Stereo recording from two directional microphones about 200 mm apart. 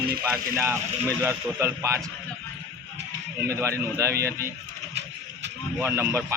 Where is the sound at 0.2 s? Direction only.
15° right (ahead or behind).